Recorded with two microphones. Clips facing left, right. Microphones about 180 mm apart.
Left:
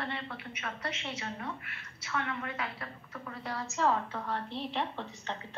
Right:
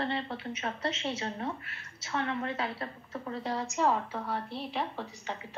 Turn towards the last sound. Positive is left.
turn(degrees=-5)  # may be behind; listen again after turning